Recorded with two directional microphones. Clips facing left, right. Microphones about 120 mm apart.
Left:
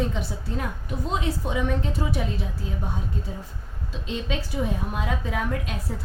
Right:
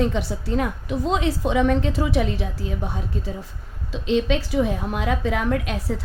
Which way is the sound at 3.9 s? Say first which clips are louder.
Right 9 dB; 90° right.